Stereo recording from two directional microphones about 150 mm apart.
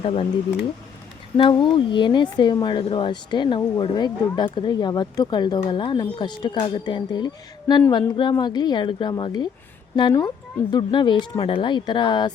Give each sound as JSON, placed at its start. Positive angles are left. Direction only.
{"t": 0.0, "sound": "speech", "side_deg": 35}
{"t": 1.4, "sound": "speech", "side_deg": 30}